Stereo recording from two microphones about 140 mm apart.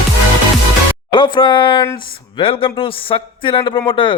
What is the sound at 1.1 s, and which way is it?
Speech, 35° left (ahead or behind).